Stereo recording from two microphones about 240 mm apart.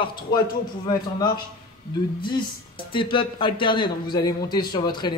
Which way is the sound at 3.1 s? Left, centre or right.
Left.